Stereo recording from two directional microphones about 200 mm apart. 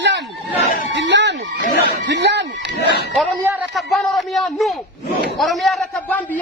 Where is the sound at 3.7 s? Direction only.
Centre (ahead or behind).